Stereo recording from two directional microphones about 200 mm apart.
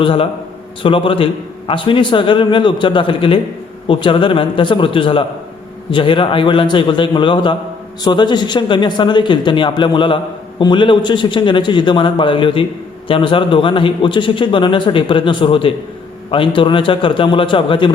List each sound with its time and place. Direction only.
0.0 s a man's voice: 25° left (ahead or behind)